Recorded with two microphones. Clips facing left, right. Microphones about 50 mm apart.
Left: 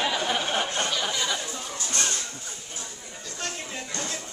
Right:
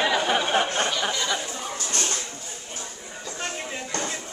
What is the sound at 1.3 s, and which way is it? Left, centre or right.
Chatter, centre.